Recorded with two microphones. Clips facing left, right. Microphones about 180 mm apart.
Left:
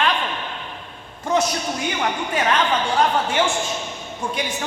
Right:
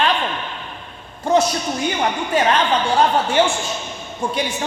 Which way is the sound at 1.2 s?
30° right (ahead or behind).